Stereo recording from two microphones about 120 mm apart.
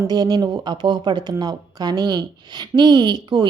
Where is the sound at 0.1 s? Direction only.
35° right (ahead or behind).